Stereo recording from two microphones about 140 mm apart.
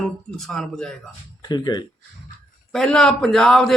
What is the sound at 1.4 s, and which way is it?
Speech, 30° left (ahead or behind).